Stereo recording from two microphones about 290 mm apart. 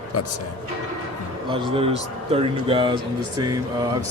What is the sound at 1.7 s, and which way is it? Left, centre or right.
Speech, centre.